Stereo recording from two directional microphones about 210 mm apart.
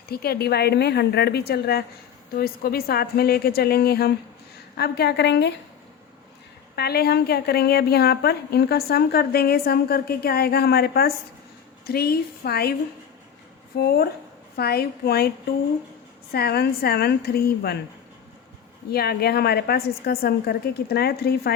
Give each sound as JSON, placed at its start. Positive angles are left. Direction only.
{"t": 0.1, "sound": "a woman's voice", "side_deg": 45}
{"t": 6.7, "sound": "a woman's voice", "side_deg": 50}
{"t": 13.7, "sound": "a woman's voice", "side_deg": 50}
{"t": 16.3, "sound": "a woman's voice", "side_deg": 50}
{"t": 18.9, "sound": "a woman's voice", "side_deg": 50}